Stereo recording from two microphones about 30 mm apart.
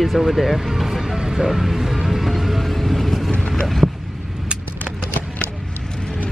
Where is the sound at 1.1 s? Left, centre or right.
Right.